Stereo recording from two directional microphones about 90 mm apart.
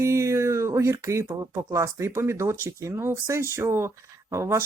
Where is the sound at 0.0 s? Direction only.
35° right (ahead or behind).